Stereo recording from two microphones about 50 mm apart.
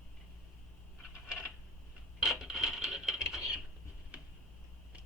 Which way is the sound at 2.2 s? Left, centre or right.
Centre.